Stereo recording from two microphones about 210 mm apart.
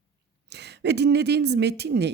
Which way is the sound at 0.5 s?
55° right (ahead or behind).